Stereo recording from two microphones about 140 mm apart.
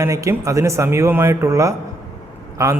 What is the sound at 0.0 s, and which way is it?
A man's voice, 20° right (ahead or behind).